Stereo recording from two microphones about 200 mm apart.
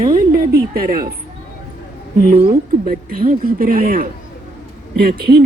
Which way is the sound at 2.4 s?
45° right (ahead or behind).